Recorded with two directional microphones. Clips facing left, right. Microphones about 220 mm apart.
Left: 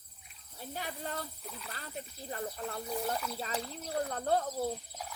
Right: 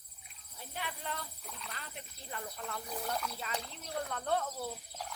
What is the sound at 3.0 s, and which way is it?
Speech, centre (ahead or behind).